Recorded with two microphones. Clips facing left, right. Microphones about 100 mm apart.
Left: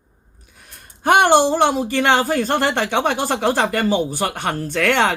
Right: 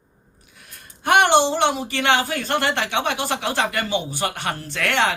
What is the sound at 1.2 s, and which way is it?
Speech, 45° left (ahead or behind).